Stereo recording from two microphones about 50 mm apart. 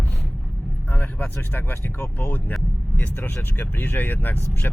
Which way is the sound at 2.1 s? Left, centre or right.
Left.